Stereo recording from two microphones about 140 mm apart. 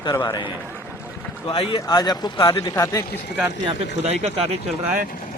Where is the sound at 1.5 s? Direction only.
40° left (ahead or behind).